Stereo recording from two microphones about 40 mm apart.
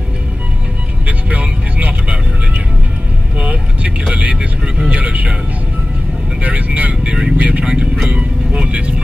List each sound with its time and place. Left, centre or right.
1.0 s vehicle: right
3.3 s vehicle: right
4.4 s vehicle: right
6.4 s speech: right
7.0 s vehicle: right